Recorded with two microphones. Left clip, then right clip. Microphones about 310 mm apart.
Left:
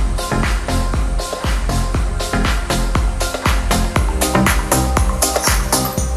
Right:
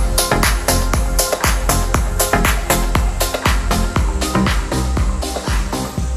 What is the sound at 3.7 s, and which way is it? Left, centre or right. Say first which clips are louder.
Music: left 1 dB; centre.